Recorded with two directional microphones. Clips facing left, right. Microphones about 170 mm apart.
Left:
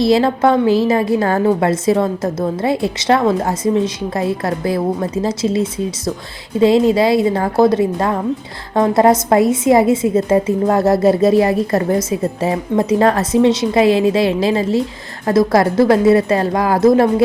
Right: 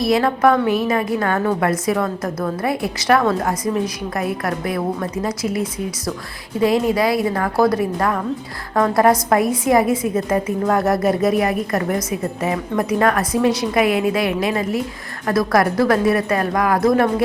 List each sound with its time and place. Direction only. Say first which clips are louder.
0.0 s a woman's voice: left 3 dB; 30° left (ahead or behind)